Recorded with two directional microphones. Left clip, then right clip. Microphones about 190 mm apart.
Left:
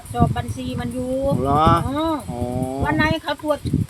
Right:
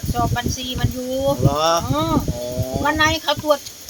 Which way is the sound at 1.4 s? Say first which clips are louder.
Left 4 dB; 55° left (ahead or behind).